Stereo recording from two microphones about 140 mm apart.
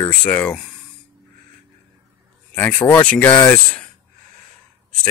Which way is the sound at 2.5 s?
10° left (ahead or behind).